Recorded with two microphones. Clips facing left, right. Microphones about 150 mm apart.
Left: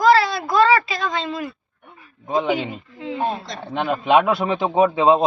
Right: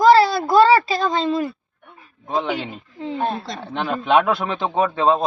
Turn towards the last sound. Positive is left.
turn(degrees=15)  # may be behind; listen again after turning